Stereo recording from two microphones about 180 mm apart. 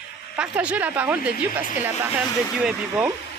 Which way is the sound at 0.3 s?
5° right (ahead or behind).